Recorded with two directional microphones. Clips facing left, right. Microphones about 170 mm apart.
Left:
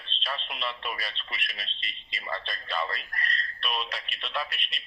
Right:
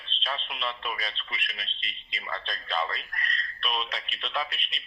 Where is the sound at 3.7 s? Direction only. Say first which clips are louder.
Right 1 dB; 5° left (ahead or behind).